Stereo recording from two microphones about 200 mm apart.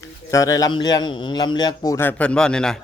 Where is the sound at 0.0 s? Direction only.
15° left (ahead or behind).